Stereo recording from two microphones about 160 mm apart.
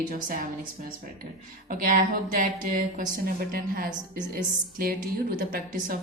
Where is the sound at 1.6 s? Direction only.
60° right (ahead or behind).